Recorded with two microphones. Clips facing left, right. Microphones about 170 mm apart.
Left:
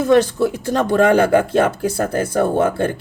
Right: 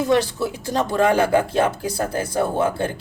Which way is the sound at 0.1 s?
50° left (ahead or behind).